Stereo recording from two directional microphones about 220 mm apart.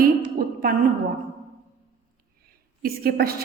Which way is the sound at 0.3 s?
40° right (ahead or behind).